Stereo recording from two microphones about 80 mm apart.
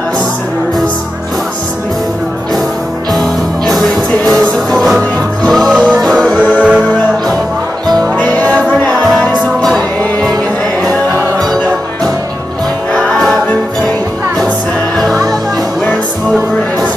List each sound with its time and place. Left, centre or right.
3.1 s music: centre
6.6 s music: centre
8.0 s music: centre
9.0 s music: centre
12.9 s music: centre
15.0 s music: centre